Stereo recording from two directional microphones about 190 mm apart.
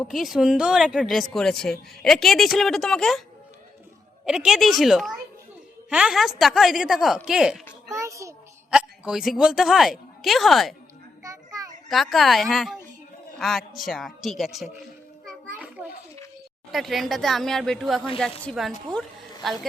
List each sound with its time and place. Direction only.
0.0 s speech: centre (ahead or behind)
4.3 s speech: centre (ahead or behind)
7.9 s child singing: 15° right (ahead or behind)
8.7 s speech: 5° right (ahead or behind)
11.2 s children playing: 20° right (ahead or behind)
11.9 s speech: centre (ahead or behind)
13.8 s speech: centre (ahead or behind)
15.2 s music: 5° right (ahead or behind)
16.7 s speech: centre (ahead or behind)